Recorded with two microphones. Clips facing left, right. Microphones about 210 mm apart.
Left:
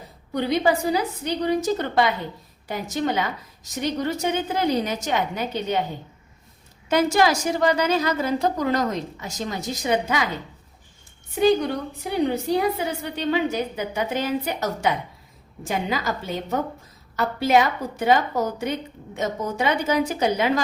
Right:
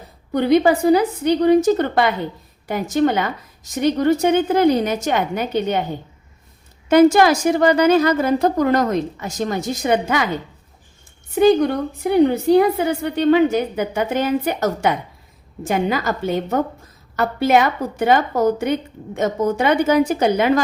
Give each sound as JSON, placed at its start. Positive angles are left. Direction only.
{"t": 0.3, "sound": "a woman's voice", "side_deg": -55}
{"t": 6.8, "sound": "a woman's voice", "side_deg": -55}
{"t": 11.3, "sound": "a woman's voice", "side_deg": -55}